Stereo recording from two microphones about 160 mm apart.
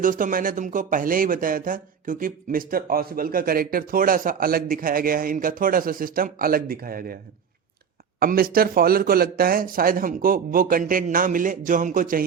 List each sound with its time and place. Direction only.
0.0 s speech: 55° right (ahead or behind)
8.2 s speech: 65° right (ahead or behind)